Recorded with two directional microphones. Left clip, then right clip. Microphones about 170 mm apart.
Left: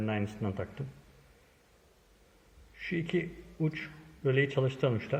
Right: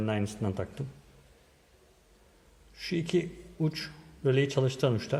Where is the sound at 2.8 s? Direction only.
20° right (ahead or behind).